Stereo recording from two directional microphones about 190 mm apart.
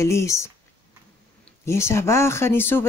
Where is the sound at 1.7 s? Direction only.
15° left (ahead or behind).